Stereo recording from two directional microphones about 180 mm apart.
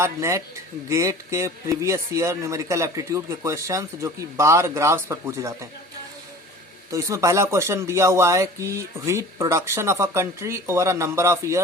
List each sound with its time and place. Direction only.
0.0 s speech: 15° right (ahead or behind)
6.9 s speech: 15° right (ahead or behind)